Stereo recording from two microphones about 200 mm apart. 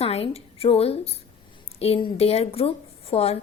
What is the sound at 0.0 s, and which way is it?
A woman's voice, 30° left (ahead or behind).